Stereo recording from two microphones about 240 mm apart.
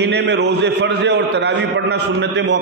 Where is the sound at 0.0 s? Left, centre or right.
Right.